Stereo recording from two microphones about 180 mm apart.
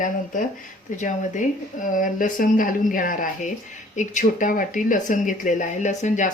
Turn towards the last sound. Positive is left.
turn(degrees=45)  # may be behind; listen again after turning